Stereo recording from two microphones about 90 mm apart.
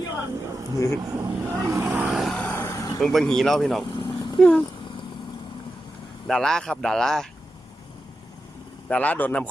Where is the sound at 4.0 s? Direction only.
60° left (ahead or behind).